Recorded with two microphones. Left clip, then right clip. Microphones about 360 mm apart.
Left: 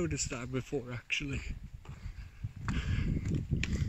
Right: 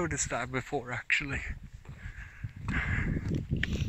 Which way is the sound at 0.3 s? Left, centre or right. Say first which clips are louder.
Right 6 dB; right.